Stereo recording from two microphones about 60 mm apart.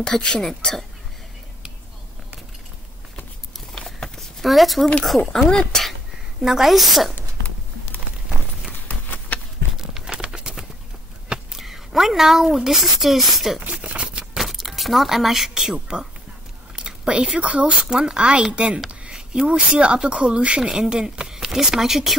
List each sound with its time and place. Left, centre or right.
0.0 s speech: centre
3.7 s a sound: centre
5.0 s a woman's voice: centre
6.4 s a woman's voice: centre
7.2 s clip-clop: left
8.7 s a sound: left
9.8 s crumpling: centre
11.2 s speech: centre
13.6 s a sound: centre
14.4 s speech: centre